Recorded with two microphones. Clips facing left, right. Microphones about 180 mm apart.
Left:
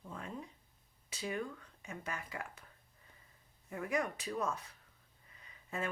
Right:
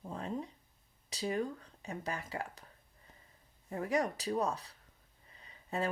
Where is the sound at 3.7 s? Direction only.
35° right (ahead or behind).